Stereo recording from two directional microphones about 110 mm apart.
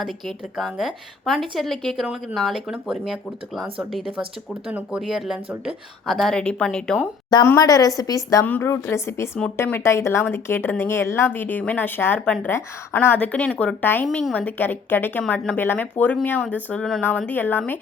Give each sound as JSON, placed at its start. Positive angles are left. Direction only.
{"t": 0.0, "sound": "a woman's voice", "side_deg": 0}
{"t": 7.4, "sound": "a woman's voice", "side_deg": 30}
{"t": 8.4, "sound": "a woman's voice", "side_deg": 20}
{"t": 15.2, "sound": "a woman's voice", "side_deg": 5}